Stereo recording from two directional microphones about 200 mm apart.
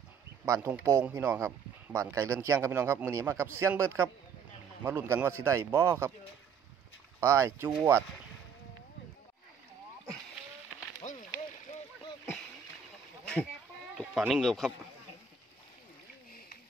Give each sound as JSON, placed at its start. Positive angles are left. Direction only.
{"t": 0.5, "sound": "a man's voice", "side_deg": -15}
{"t": 7.2, "sound": "a man's voice", "side_deg": -15}
{"t": 11.0, "sound": "run", "side_deg": 35}
{"t": 13.2, "sound": "a sound", "side_deg": 5}
{"t": 13.9, "sound": "speech", "side_deg": 0}